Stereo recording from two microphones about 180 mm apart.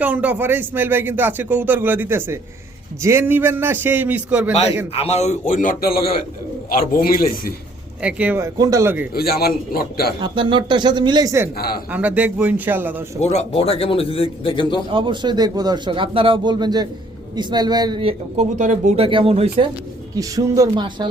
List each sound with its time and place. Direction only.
0.0 s speech: 10° right (ahead or behind)
4.9 s a man's voice: 35° left (ahead or behind); by 7.5 s 55° left (ahead or behind)
8.0 s speech: 10° right (ahead or behind)
9.1 s a man's voice: 60° left (ahead or behind)
10.2 s a man's voice: 25° right (ahead or behind)
11.5 s a man's voice: 60° left (ahead or behind)
11.9 s speech: 10° right (ahead or behind)
13.1 s a man's voice: 40° left (ahead or behind)
14.8 s a man's voice: 25° right (ahead or behind)
18.3 s speech: 40° right (ahead or behind)
20.1 s a man's voice: 20° right (ahead or behind)